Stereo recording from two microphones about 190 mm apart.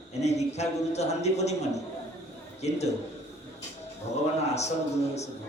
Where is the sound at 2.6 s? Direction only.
35° left (ahead or behind).